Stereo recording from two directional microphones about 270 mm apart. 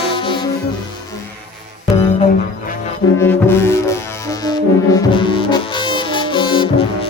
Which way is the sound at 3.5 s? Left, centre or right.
Centre.